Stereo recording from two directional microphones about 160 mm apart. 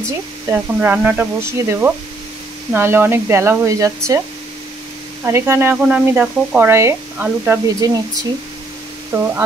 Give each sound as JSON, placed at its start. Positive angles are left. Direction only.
{"t": 0.5, "sound": "speech", "side_deg": -10}
{"t": 5.2, "sound": "speech", "side_deg": -15}
{"t": 9.1, "sound": "speech", "side_deg": -15}